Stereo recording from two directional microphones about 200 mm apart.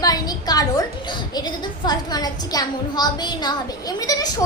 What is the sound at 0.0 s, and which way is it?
A woman's voice, 20° left (ahead or behind).